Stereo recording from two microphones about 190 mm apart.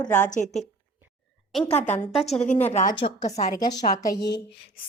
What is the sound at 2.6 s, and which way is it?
Speech, 35° left (ahead or behind).